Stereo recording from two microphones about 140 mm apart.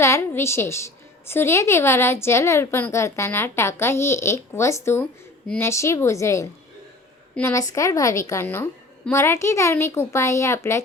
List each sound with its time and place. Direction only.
0.0 s a woman's voice: 20° left (ahead or behind)